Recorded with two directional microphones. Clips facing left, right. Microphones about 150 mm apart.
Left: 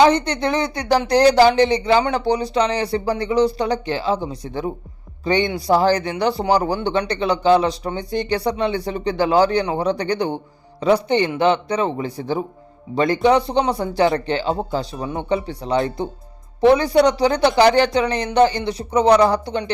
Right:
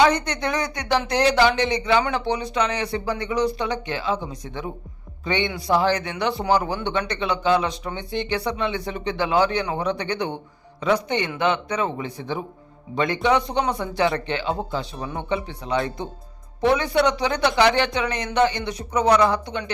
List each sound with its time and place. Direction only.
0.0 s speech: 30° left (ahead or behind)